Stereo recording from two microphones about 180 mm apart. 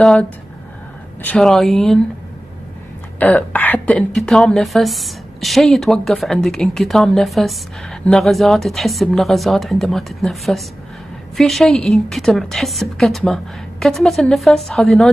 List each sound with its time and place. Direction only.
0.0 s a woman's voice: 5° left (ahead or behind)
3.2 s a woman's voice: 10° left (ahead or behind)